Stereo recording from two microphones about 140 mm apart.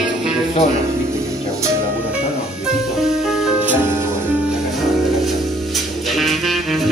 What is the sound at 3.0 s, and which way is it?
Music, 5° right (ahead or behind).